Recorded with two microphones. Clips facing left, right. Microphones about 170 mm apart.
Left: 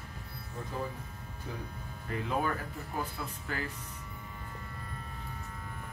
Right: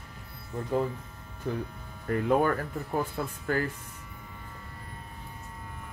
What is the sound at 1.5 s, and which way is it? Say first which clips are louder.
Speech: right 9 dB; 60° right (ahead or behind).